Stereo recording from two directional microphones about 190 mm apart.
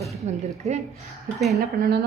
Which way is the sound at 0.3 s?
35° right (ahead or behind).